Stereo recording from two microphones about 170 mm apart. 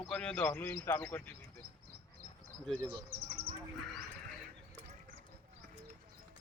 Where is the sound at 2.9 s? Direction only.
65° right (ahead or behind).